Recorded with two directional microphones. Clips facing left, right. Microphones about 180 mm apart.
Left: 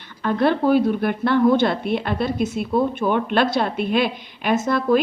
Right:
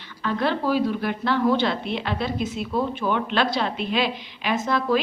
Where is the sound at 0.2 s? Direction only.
50° left (ahead or behind).